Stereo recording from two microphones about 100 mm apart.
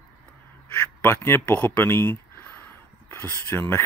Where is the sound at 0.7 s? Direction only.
20° left (ahead or behind).